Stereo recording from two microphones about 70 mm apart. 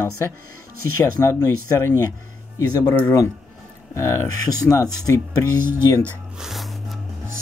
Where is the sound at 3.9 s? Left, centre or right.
Left.